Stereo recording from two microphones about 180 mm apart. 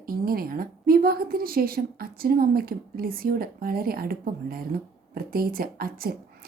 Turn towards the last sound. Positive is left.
turn(degrees=-55)  # may be behind; listen again after turning